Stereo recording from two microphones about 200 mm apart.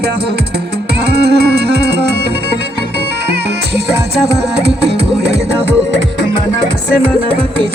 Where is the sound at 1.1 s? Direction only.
55° right (ahead or behind).